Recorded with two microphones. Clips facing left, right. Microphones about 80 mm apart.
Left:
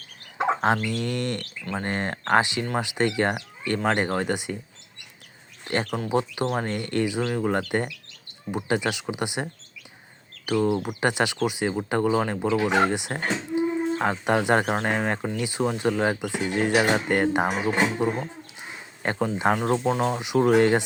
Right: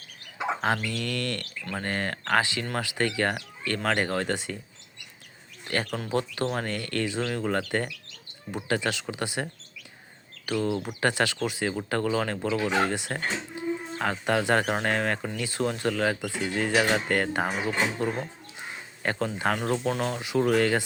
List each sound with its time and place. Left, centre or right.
0.9 s speech: left
5.6 s speech: left
8.6 s speech: centre
12.5 s speech: left
12.9 s speech: centre
13.6 s a sound: left
14.7 s speech: centre